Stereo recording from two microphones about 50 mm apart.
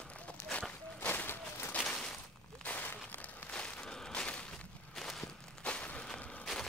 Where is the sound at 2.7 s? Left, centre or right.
Left.